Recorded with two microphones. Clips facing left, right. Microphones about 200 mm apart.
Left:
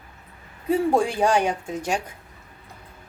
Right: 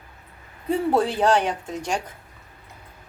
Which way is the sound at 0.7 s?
10° left (ahead or behind).